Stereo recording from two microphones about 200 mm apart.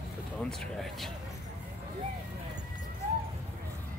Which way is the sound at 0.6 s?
Centre (ahead or behind).